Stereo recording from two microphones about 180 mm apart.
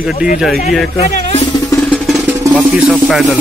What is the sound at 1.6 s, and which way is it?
Music, 10° left (ahead or behind).